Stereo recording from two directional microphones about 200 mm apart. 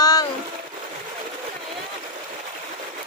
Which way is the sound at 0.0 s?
20° left (ahead or behind).